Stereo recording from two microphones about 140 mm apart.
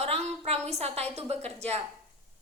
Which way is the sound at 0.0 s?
45° right (ahead or behind).